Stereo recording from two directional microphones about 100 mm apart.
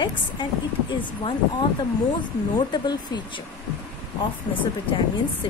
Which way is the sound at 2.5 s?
45° left (ahead or behind).